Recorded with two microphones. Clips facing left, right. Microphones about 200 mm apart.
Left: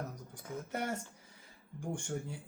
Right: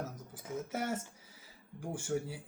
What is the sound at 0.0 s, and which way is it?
Speech, 5° right (ahead or behind).